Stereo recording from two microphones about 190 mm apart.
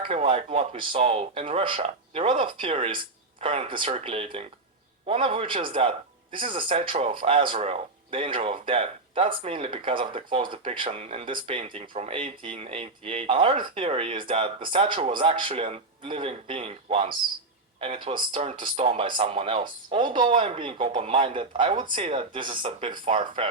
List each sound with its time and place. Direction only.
0.0 s a man's voice: 30° right (ahead or behind)